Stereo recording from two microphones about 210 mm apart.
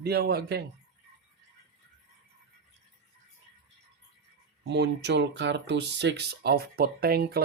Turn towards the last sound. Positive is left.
turn(degrees=-45)  # may be behind; listen again after turning